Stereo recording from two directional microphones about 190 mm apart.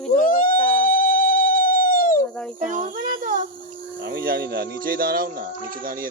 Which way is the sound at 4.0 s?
55° right (ahead or behind).